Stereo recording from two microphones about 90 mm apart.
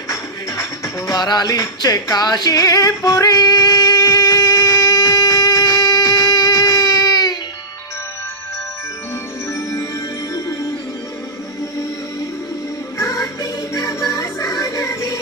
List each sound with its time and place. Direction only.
0.1 s music: 35° left (ahead or behind)
9.5 s music: 35° left (ahead or behind)
13.0 s music: 40° left (ahead or behind)